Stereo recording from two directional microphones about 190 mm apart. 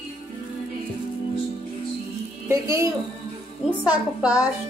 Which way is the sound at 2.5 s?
15° right (ahead or behind).